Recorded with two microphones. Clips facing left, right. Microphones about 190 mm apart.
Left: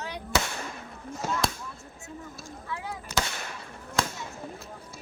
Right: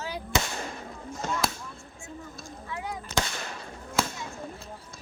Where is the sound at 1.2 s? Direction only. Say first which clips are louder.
Left 1 dB; 5° left (ahead or behind).